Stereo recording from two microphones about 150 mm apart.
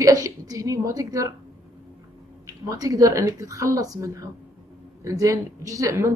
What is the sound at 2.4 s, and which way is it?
A woman's voice, 20° right (ahead or behind).